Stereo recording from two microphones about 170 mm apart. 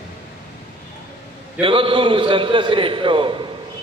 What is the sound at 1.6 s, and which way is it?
A man's voice, 30° right (ahead or behind).